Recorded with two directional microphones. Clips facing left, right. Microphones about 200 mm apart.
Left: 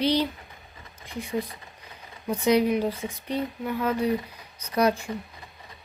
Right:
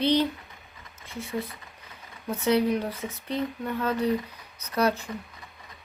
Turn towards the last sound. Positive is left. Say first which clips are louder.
# left 2 dB
turn(degrees=15)  # may be behind; listen again after turning